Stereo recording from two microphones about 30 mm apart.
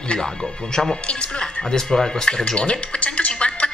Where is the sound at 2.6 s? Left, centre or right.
Left.